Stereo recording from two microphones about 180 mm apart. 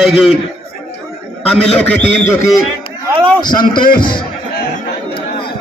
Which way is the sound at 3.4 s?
25° left (ahead or behind).